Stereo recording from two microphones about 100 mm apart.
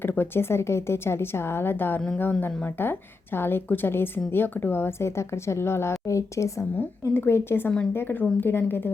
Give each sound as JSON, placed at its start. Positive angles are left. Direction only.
{"t": 0.0, "sound": "a woman's voice", "side_deg": 20}